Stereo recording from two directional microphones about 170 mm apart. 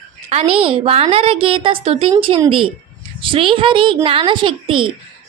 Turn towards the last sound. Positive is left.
turn(degrees=-30)  # may be behind; listen again after turning